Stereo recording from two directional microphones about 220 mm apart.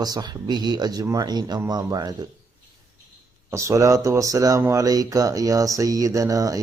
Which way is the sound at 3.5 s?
15° right (ahead or behind).